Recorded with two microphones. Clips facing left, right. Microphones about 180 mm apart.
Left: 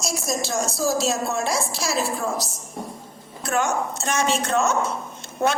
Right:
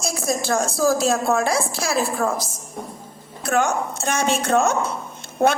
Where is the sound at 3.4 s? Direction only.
55° right (ahead or behind).